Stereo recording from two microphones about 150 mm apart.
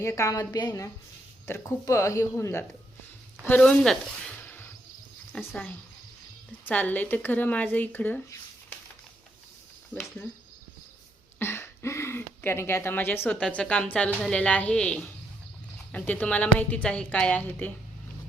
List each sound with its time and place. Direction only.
0.0 s a woman's voice: 20° left (ahead or behind)
6.7 s speech: 10° left (ahead or behind)
11.3 s speech: 15° left (ahead or behind)